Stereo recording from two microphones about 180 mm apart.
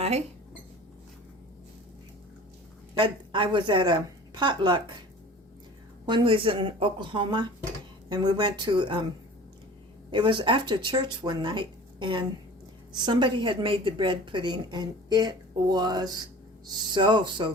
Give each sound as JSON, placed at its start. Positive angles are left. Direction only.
{"t": 2.9, "sound": "a woman's voice", "side_deg": -25}
{"t": 6.1, "sound": "a woman's voice", "side_deg": -25}
{"t": 10.1, "sound": "a woman's voice", "side_deg": -25}